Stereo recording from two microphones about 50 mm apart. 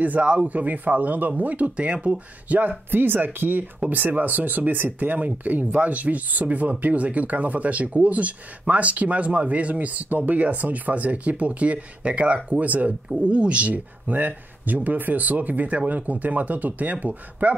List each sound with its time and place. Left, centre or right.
0.0 s speech: right
2.9 s speech: right